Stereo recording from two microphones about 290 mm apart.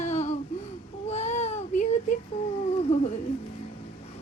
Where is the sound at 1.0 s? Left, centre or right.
Left.